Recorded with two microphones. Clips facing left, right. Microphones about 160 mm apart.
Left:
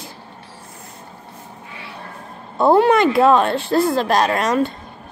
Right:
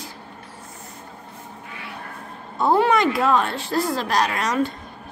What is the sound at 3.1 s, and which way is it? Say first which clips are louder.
Speech: left 6 dB; 30° left (ahead or behind).